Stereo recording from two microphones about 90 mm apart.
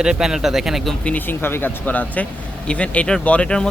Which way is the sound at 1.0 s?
20° left (ahead or behind).